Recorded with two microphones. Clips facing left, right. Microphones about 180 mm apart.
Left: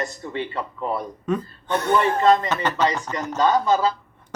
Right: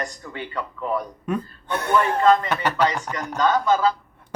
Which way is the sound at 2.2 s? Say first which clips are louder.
Even; 35° left (ahead or behind).